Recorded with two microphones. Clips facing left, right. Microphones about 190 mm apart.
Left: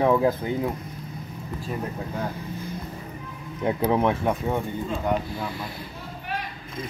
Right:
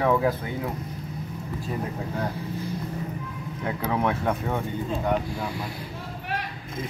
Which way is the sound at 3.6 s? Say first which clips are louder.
Left 4 dB; 20° left (ahead or behind).